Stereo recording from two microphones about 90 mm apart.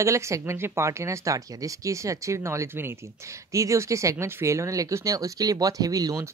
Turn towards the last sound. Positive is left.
turn(degrees=-40)  # may be behind; listen again after turning